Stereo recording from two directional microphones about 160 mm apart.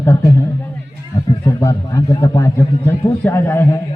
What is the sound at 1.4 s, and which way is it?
A man's voice, 20° left (ahead or behind).